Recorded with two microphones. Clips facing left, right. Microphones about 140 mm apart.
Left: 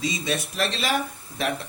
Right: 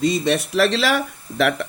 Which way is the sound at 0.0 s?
60° right (ahead or behind).